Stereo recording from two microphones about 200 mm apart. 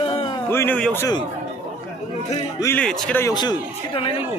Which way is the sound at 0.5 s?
10° left (ahead or behind).